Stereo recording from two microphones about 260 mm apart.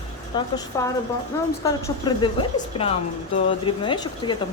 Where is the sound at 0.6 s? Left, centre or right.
Centre.